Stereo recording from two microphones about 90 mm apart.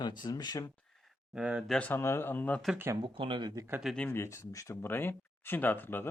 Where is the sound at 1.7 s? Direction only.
15° left (ahead or behind).